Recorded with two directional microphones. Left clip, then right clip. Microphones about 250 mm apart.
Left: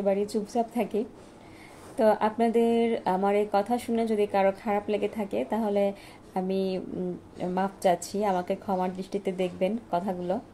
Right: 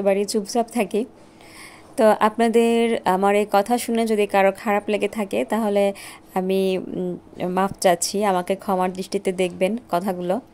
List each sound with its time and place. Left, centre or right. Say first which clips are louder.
0.0 s speech: right 6 dB; right